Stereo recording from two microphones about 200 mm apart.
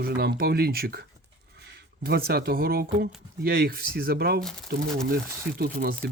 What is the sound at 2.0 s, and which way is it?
Speech, 50° right (ahead or behind).